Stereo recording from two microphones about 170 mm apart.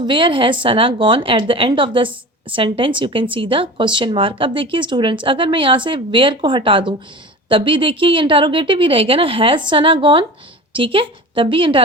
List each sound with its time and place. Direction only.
0.0 s a woman's voice: 30° right (ahead or behind)